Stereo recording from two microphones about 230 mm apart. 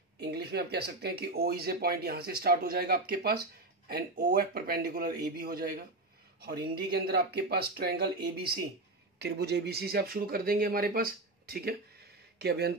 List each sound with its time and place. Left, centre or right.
0.2 s speech: right